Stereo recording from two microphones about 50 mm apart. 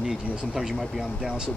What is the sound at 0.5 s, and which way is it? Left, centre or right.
Speech, centre.